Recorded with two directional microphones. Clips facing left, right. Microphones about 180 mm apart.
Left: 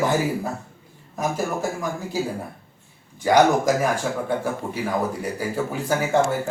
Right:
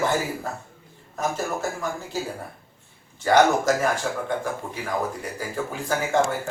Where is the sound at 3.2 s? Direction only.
15° left (ahead or behind).